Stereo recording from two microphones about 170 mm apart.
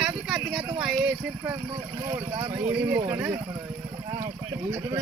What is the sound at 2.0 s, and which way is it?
Speech, 25° right (ahead or behind).